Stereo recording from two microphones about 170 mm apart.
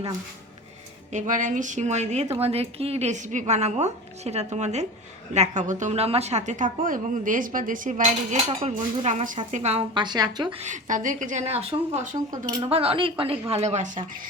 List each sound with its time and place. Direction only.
1.1 s a woman's voice: 50° right (ahead or behind); by 10.6 s 25° right (ahead or behind)
10.6 s a woman's voice: 45° right (ahead or behind)
12.5 s a woman's voice: 20° right (ahead or behind)
12.7 s a woman's voice: 35° right (ahead or behind); by 14.3 s 50° right (ahead or behind)